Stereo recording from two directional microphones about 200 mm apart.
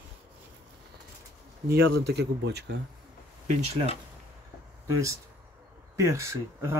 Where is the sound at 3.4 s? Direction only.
30° right (ahead or behind).